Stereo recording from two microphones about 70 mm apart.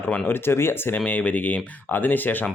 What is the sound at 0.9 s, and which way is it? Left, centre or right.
Speech, centre.